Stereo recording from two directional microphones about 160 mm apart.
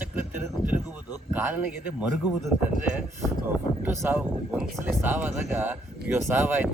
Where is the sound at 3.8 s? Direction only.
10° right (ahead or behind).